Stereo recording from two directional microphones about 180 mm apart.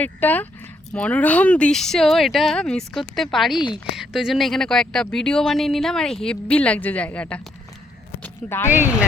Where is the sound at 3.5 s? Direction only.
25° left (ahead or behind).